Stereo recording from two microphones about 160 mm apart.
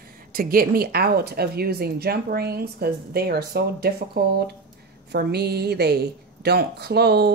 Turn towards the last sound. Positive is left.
turn(degrees=-90)